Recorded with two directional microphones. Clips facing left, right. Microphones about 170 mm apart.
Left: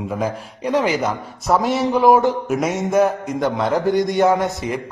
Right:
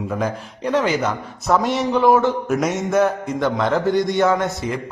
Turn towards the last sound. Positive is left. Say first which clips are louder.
# left 2 dB
turn(degrees=15)  # may be behind; listen again after turning